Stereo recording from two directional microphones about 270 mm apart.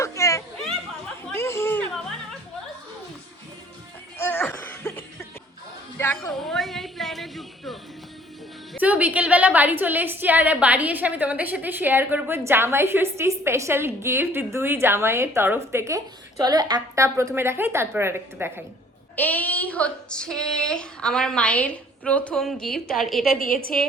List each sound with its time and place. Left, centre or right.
0.0 s children playing: centre
4.2 s laughter: centre
6.0 s a sound: centre
8.7 s a woman's voice: centre
19.1 s a woman's voice: centre
23.3 s a woman's voice: left